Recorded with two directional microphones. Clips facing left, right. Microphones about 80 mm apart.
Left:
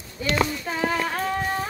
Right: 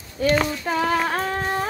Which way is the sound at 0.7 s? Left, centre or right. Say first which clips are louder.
Right 6 dB; right.